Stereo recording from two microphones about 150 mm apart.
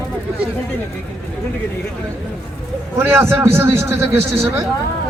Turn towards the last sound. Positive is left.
turn(degrees=-20)  # may be behind; listen again after turning